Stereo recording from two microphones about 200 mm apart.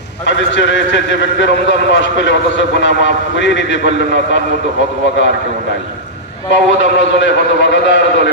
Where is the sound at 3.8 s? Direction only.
40° right (ahead or behind).